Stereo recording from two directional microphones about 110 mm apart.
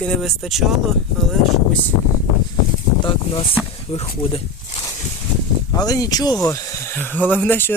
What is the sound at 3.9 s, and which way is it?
Speech, 65° left (ahead or behind).